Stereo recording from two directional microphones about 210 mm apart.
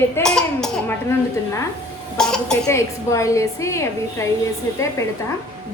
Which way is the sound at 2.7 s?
15° left (ahead or behind).